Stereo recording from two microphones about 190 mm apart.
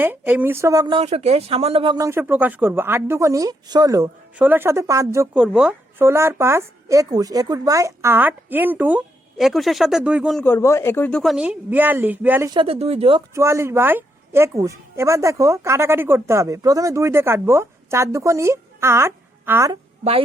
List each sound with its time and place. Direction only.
0.0 s speech: 10° right (ahead or behind); by 2.0 s 25° right (ahead or behind)
2.0 s a woman's voice: 10° right (ahead or behind)
10.4 s speech: 15° left (ahead or behind)
11.2 s a woman's voice: 5° right (ahead or behind)
12.5 s speech: 30° right (ahead or behind)
13.3 s a woman's voice: 15° right (ahead or behind)
19.7 s a woman's voice: 30° right (ahead or behind)